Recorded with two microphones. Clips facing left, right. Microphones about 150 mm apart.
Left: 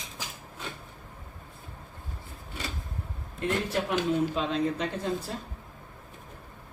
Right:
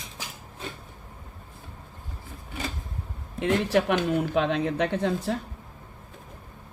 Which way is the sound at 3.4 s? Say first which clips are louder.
Right 6 dB; 70° right (ahead or behind).